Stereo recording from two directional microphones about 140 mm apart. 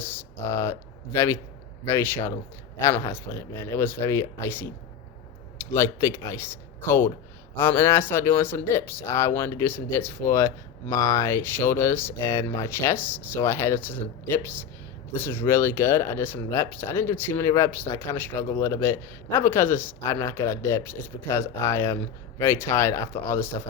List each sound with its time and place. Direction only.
0.0 s speech: 15° left (ahead or behind)